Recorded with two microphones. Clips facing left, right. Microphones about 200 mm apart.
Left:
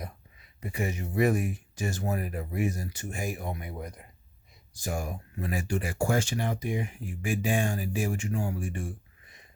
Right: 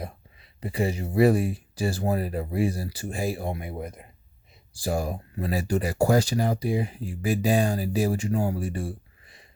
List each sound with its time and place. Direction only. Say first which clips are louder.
0.6 s speech: right 5 dB; 35° right (ahead or behind)